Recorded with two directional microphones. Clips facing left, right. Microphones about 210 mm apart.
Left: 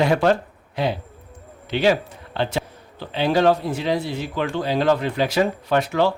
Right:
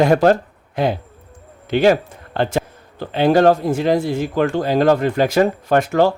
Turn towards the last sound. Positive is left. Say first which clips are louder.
# right 4 dB
turn(degrees=-45)  # may be behind; listen again after turning